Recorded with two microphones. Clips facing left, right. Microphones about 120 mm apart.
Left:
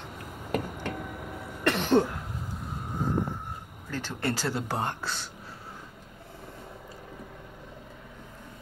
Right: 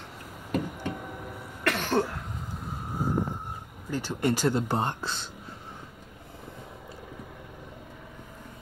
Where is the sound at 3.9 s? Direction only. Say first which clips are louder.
Right 4 dB; 15° right (ahead or behind).